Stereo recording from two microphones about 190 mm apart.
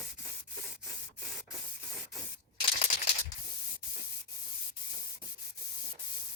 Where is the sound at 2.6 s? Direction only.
30° left (ahead or behind).